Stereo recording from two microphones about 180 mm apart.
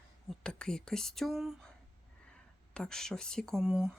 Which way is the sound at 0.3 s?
5° left (ahead or behind).